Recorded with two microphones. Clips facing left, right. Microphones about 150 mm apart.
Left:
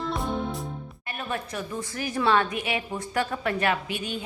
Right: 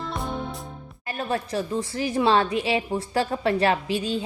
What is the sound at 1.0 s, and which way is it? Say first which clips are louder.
A woman's voice: right 5 dB; 35° right (ahead or behind).